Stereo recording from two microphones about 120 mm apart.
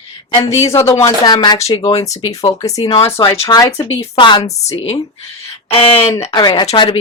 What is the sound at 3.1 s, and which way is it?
Speech, 50° left (ahead or behind).